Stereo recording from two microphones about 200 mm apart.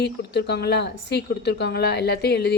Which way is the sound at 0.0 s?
55° left (ahead or behind).